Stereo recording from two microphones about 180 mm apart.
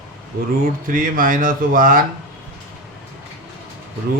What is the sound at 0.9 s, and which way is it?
Speech, 50° right (ahead or behind).